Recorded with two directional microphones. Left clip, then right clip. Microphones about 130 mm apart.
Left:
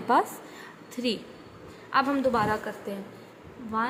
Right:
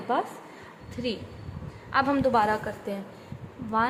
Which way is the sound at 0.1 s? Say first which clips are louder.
Left 5 dB; 20° left (ahead or behind).